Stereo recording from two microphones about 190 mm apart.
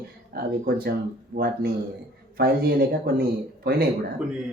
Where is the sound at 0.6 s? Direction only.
50° right (ahead or behind).